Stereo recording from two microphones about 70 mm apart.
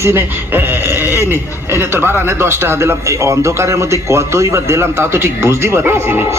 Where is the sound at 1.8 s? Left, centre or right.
Right.